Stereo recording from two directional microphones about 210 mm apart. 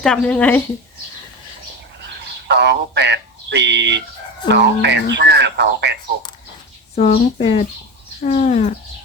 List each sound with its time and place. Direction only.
0.0 s speech: 5° left (ahead or behind)
2.5 s speech: 55° right (ahead or behind)
6.9 s speech: 30° left (ahead or behind)
8.2 s a sound: 35° left (ahead or behind)